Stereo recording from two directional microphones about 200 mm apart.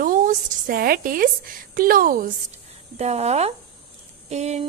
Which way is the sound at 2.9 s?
30° right (ahead or behind).